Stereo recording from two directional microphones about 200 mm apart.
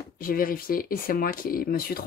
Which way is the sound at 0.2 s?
45° left (ahead or behind).